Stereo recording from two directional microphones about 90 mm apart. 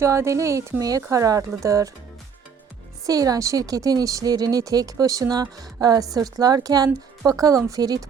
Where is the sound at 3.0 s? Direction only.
40° right (ahead or behind).